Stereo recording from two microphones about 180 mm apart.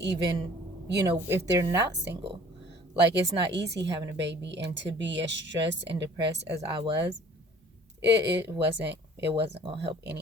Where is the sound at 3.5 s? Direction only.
70° right (ahead or behind).